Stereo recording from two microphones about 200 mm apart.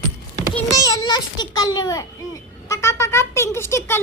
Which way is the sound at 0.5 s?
15° left (ahead or behind).